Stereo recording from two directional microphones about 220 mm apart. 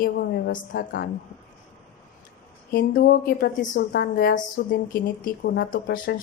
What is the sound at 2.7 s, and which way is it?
A woman's voice, 40° left (ahead or behind).